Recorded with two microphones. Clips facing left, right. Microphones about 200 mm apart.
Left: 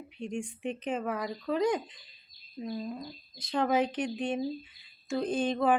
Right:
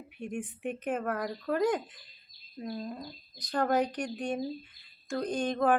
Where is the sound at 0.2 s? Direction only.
5° right (ahead or behind).